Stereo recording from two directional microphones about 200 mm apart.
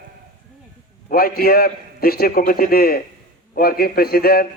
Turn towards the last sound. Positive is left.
turn(degrees=50)  # may be behind; listen again after turning